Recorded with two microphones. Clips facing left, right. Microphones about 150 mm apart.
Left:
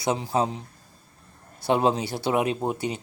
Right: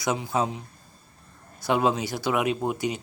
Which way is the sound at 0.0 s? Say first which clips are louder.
Left 1 dB; 30° left (ahead or behind).